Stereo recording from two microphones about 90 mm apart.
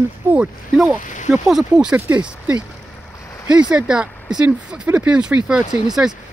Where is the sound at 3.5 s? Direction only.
15° right (ahead or behind).